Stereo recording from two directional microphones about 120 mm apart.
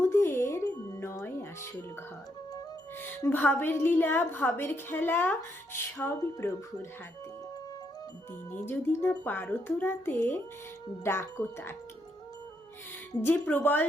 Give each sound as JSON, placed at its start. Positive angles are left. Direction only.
{"t": 0.0, "sound": "music", "side_deg": 20}
{"t": 3.0, "sound": "a woman's voice", "side_deg": 15}
{"t": 8.5, "sound": "a woman's voice", "side_deg": 15}
{"t": 13.2, "sound": "a woman's voice", "side_deg": 15}